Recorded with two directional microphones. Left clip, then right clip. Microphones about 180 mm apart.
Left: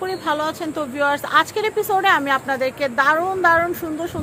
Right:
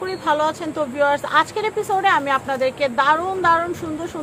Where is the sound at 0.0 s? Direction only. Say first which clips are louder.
Right 2 dB; 20° left (ahead or behind).